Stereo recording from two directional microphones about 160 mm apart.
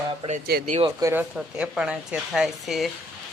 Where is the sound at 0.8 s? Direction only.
15° right (ahead or behind).